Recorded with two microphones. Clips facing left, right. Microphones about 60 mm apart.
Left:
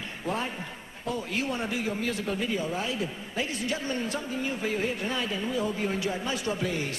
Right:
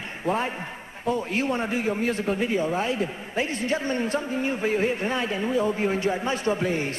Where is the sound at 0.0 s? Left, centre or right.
Right.